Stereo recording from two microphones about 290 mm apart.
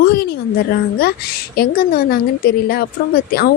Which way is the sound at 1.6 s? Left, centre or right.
Left.